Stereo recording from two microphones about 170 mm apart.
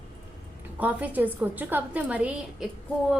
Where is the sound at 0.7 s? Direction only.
10° right (ahead or behind).